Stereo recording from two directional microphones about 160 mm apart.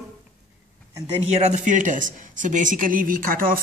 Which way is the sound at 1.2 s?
45° right (ahead or behind).